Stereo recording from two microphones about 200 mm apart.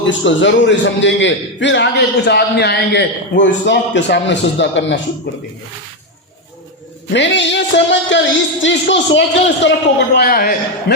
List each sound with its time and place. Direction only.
0.1 s a man's voice: 65° left (ahead or behind)
7.1 s a man's voice: 60° left (ahead or behind)
10.2 s a man's voice: 50° left (ahead or behind)